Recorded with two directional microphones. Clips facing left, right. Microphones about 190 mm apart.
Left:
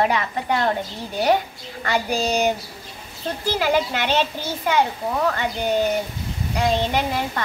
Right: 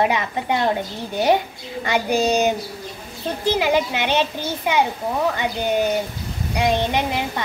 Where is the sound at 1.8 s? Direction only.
15° right (ahead or behind).